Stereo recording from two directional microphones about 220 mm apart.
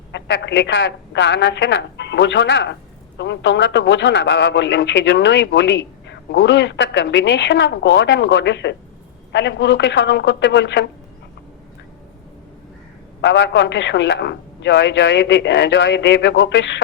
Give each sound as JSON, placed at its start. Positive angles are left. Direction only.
{"t": 0.1, "sound": "a woman's voice", "side_deg": 55}
{"t": 13.2, "sound": "a man's voice", "side_deg": 55}